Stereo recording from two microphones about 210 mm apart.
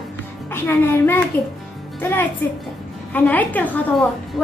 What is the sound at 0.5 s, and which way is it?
A woman's voice, 10° left (ahead or behind).